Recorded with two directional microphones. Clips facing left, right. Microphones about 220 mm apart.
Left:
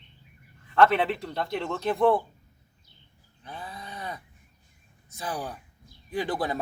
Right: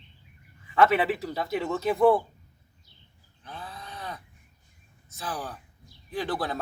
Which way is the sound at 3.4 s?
15° left (ahead or behind).